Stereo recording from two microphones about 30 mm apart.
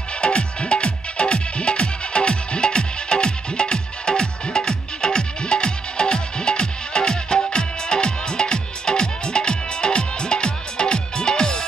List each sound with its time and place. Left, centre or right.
0.2 s music: left